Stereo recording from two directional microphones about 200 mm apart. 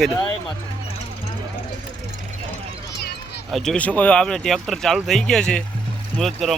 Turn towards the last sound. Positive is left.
turn(degrees=0)  # may be behind; listen again after turning